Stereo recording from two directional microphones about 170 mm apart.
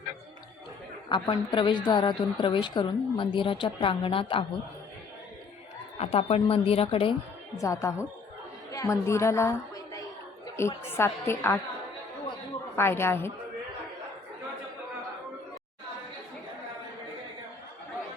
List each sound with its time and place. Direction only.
1.1 s a woman's voice: 30° left (ahead or behind)
6.0 s a woman's voice: 35° left (ahead or behind)
7.5 s a woman's voice: 15° left (ahead or behind)
12.7 s a woman's voice: 15° left (ahead or behind)